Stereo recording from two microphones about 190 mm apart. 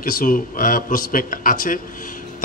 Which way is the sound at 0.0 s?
45° left (ahead or behind).